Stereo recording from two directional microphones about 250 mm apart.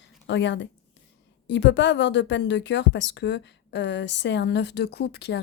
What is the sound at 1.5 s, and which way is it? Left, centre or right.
Speech, left.